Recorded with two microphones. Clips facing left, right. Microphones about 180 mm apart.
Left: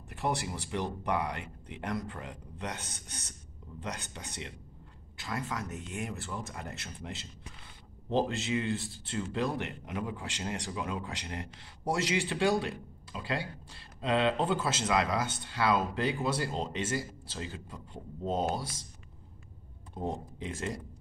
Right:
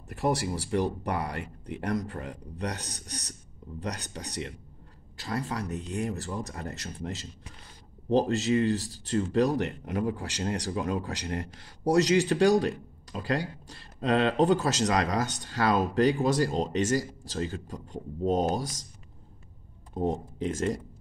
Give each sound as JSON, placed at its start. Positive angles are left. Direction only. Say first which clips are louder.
{"t": 0.1, "sound": "speech", "louder": "right 5 dB", "side_deg": -40}
{"t": 20.0, "sound": "speech", "louder": "right 7 dB", "side_deg": -40}